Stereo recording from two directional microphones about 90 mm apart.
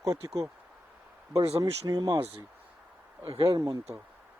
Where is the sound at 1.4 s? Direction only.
35° right (ahead or behind).